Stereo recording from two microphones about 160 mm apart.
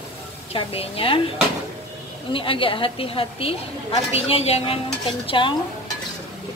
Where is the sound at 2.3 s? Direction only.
35° left (ahead or behind).